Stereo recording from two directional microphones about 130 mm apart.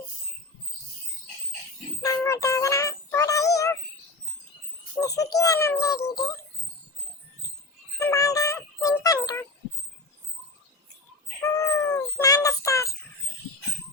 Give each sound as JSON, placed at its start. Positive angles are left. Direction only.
{"t": 2.0, "sound": "synthetic singing", "side_deg": 25}
{"t": 4.9, "sound": "speech", "side_deg": 25}
{"t": 7.9, "sound": "synthetic singing", "side_deg": 25}
{"t": 9.2, "sound": "a sound", "side_deg": 20}
{"t": 11.4, "sound": "cat", "side_deg": 25}